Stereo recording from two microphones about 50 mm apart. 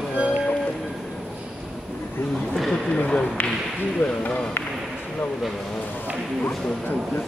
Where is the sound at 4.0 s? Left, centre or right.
Left.